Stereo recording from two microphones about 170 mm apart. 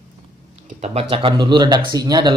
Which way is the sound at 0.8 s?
40° right (ahead or behind).